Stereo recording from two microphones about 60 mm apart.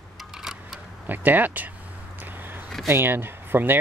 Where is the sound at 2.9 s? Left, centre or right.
Right.